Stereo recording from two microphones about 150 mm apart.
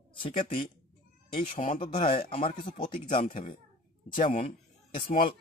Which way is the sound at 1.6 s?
35° left (ahead or behind).